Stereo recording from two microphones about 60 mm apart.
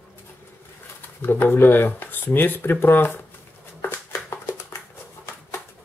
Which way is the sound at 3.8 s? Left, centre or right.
Left.